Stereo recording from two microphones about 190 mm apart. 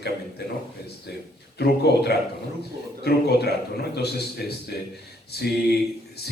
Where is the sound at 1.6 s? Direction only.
60° left (ahead or behind).